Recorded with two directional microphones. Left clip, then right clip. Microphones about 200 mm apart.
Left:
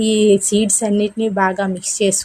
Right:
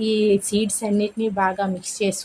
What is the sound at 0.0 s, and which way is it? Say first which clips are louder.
A woman's voice: left 5 dB; 20° left (ahead or behind).